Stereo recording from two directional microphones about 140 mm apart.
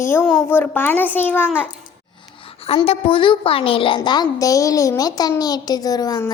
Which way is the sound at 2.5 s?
45° left (ahead or behind).